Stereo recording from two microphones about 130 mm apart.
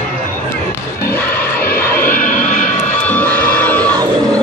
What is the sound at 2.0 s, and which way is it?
Music, 90° left.